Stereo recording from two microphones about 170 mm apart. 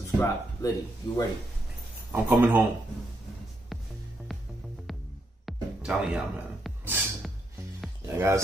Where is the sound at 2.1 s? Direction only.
10° right (ahead or behind).